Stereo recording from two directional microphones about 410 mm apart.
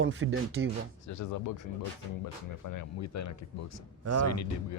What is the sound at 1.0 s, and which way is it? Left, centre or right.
Speech, left.